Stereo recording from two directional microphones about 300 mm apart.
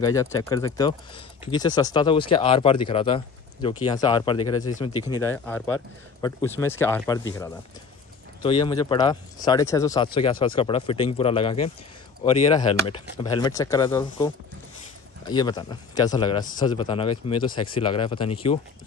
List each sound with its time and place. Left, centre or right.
0.0 s speech: centre